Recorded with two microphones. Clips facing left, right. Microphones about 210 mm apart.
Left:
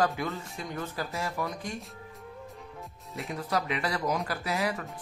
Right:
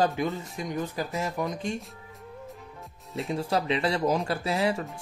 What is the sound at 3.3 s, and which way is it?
Speech, 25° right (ahead or behind).